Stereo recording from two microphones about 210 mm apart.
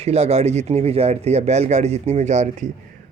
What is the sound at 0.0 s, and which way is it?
Speech, 30° right (ahead or behind).